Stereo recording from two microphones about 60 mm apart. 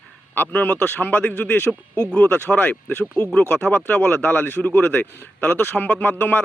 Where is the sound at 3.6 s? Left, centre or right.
Left.